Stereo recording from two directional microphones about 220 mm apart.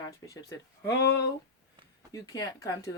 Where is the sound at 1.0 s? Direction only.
50° left (ahead or behind).